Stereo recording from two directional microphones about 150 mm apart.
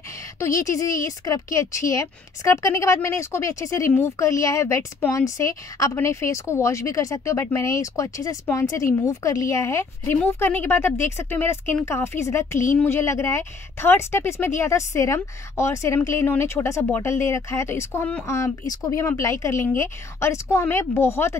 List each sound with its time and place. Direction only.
0.4 s a woman's voice: 20° left (ahead or behind)